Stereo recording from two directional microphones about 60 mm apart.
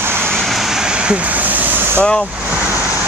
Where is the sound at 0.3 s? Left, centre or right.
Centre; by 2.0 s right.